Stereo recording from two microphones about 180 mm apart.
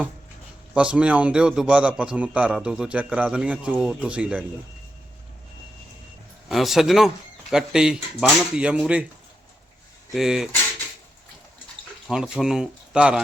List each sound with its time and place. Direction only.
0.7 s a man's voice: 5° right (ahead or behind)
6.5 s a man's voice: centre (ahead or behind)
10.2 s a man's voice: 5° right (ahead or behind)
12.0 s a man's voice: centre (ahead or behind)